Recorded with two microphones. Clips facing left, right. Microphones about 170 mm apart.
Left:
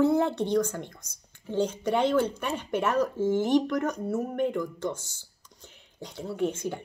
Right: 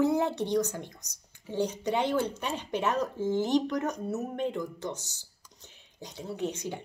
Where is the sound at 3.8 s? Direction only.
25° right (ahead or behind).